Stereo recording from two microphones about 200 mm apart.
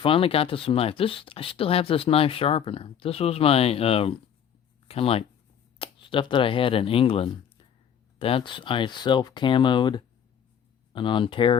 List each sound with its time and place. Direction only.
0.0 s speech: 25° left (ahead or behind)